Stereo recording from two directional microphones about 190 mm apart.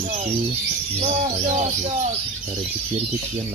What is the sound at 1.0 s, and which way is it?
Bird, 40° right (ahead or behind).